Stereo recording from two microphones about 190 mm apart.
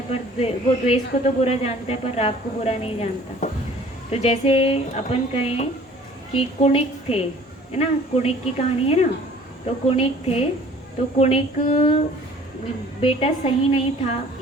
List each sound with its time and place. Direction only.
0.1 s speech: 30° left (ahead or behind)
13.0 s a woman's voice: 30° left (ahead or behind)